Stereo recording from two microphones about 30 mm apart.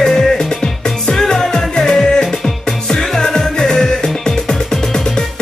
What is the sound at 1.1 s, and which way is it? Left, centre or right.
Music, left.